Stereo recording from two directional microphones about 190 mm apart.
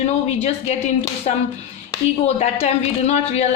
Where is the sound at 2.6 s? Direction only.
35° left (ahead or behind).